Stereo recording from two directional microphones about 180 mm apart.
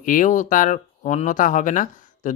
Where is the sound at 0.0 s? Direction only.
45° left (ahead or behind).